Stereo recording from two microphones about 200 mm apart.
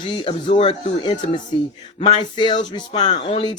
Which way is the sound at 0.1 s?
25° left (ahead or behind).